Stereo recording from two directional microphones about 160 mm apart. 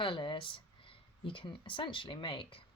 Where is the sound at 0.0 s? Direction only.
30° left (ahead or behind).